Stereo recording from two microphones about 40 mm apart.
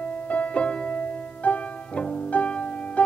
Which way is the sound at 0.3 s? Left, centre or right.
Left.